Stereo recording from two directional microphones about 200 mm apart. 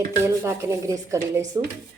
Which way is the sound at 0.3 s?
15° right (ahead or behind).